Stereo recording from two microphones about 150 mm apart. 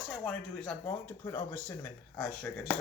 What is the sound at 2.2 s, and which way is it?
Dishes, 5° left (ahead or behind).